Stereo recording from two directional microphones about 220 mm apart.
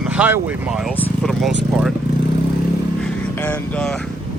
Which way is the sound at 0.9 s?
5° left (ahead or behind).